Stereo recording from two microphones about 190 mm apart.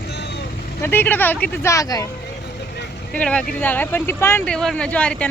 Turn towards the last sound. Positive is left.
turn(degrees=5)  # may be behind; listen again after turning